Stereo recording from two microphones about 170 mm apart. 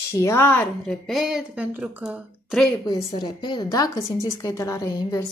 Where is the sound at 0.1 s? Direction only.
15° left (ahead or behind); by 2.7 s centre (ahead or behind).